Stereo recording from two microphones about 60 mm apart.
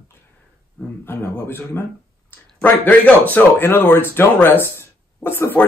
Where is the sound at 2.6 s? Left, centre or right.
Left.